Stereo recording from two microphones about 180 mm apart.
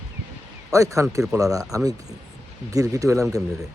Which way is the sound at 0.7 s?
15° right (ahead or behind).